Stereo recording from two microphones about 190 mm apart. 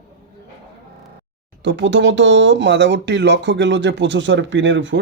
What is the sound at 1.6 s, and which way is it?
Speech, 70° right (ahead or behind).